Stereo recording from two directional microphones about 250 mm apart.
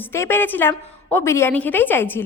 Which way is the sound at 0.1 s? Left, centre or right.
Centre.